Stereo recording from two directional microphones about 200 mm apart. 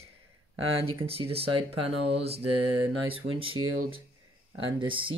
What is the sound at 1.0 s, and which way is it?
Speech, 30° right (ahead or behind).